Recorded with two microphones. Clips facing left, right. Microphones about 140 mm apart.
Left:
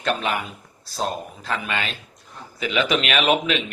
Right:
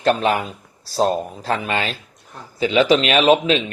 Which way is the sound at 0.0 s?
35° right (ahead or behind).